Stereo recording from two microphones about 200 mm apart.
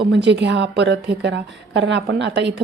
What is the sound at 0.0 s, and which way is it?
A woman's voice, 60° right (ahead or behind).